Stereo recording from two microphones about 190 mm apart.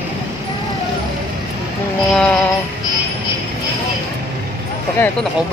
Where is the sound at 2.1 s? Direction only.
5° left (ahead or behind).